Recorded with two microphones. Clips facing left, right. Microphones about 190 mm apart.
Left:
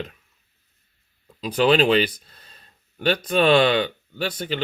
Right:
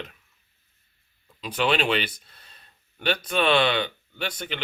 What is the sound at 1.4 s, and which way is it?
Speech, 35° left (ahead or behind).